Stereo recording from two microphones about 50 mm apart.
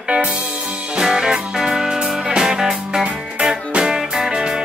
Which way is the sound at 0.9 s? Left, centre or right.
Centre.